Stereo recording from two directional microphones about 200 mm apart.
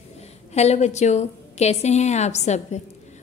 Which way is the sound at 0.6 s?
35° left (ahead or behind).